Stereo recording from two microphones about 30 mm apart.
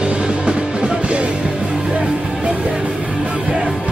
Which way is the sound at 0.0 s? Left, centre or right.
Right.